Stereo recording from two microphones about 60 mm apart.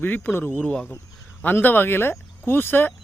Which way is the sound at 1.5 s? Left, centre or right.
Left.